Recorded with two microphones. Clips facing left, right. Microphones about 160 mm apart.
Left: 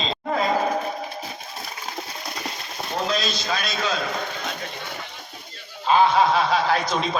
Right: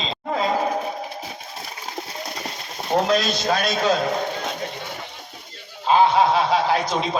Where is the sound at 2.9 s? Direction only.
60° right (ahead or behind).